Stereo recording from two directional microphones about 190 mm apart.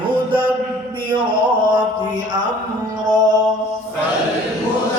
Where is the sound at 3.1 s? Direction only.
20° right (ahead or behind).